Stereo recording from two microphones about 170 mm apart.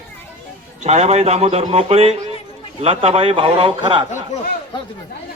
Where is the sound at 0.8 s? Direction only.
40° right (ahead or behind).